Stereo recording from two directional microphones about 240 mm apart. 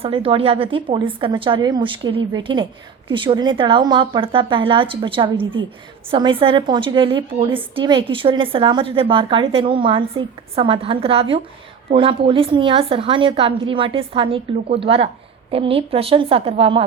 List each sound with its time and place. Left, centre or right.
0.0 s a woman's voice: right